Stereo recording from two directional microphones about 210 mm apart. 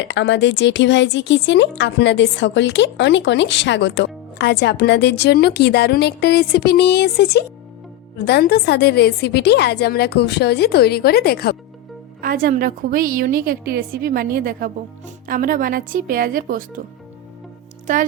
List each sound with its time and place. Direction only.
0.0 s a woman's voice: 60° left (ahead or behind)
12.2 s a woman's voice: 40° right (ahead or behind)